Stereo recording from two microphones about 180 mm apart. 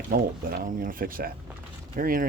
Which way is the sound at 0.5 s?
50° right (ahead or behind).